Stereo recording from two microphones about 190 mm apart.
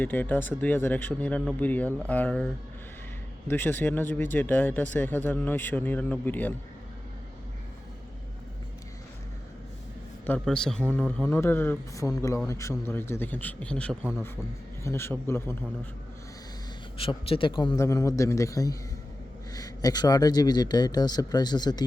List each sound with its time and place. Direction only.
0.0 s speech: 10° left (ahead or behind)
10.2 s a man's voice: 5° left (ahead or behind)
17.0 s speech: 30° left (ahead or behind)